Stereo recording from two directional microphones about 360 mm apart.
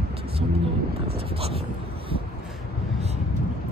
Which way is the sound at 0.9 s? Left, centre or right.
Right.